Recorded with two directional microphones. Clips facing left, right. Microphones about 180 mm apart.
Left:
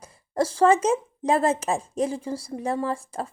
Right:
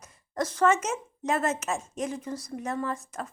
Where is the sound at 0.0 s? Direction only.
30° left (ahead or behind).